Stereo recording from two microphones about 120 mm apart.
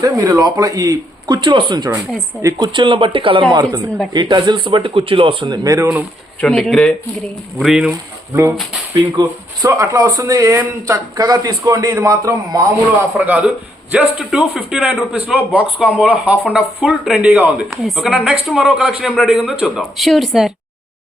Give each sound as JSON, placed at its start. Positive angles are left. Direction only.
{"t": 0.0, "sound": "a man's voice", "side_deg": -30}
{"t": 1.4, "sound": "speech", "side_deg": -45}
{"t": 2.4, "sound": "a man's voice", "side_deg": -30}
{"t": 2.7, "sound": "speech", "side_deg": -45}
{"t": 5.6, "sound": "a man's voice", "side_deg": -25}
{"t": 6.4, "sound": "speech", "side_deg": 10}
{"t": 9.1, "sound": "a man's voice", "side_deg": -30}
{"t": 13.1, "sound": "a man's voice", "side_deg": -10}